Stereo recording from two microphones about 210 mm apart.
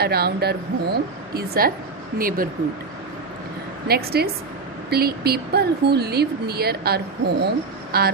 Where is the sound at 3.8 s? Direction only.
45° right (ahead or behind).